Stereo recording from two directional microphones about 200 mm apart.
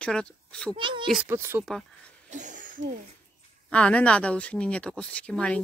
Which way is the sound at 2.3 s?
40° right (ahead or behind).